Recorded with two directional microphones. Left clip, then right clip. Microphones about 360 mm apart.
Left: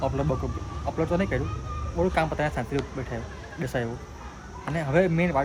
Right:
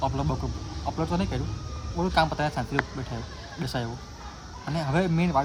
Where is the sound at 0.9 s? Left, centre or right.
Centre.